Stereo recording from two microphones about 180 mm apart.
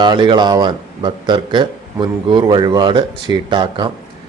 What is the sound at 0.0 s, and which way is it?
Speech, 25° right (ahead or behind).